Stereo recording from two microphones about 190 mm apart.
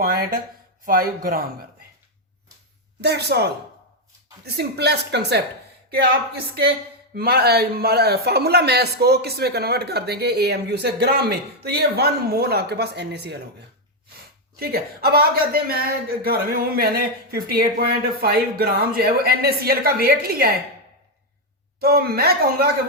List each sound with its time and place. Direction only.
0.0 s a man's voice: 50° right (ahead or behind)
3.0 s a man's voice: 60° right (ahead or behind)
7.2 s a man's voice: 55° right (ahead or behind)
14.6 s a man's voice: 55° right (ahead or behind)
21.8 s a man's voice: 55° right (ahead or behind)